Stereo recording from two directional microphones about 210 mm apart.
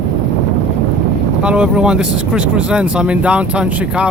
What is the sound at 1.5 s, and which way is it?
Speech, 5° right (ahead or behind).